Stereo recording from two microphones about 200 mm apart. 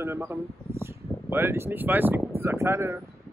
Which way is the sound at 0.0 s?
10° right (ahead or behind).